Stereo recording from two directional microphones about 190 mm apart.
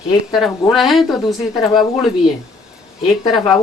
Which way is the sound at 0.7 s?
Centre (ahead or behind).